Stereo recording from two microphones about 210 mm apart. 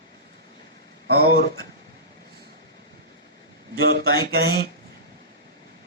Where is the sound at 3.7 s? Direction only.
50° right (ahead or behind).